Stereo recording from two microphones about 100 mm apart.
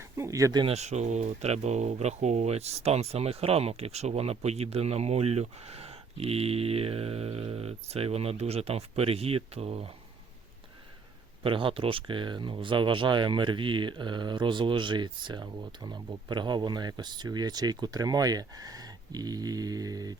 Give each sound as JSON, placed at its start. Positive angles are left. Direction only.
{"t": 0.0, "sound": "speech", "side_deg": -30}
{"t": 0.6, "sound": "speech", "side_deg": -90}
{"t": 11.4, "sound": "speech", "side_deg": -60}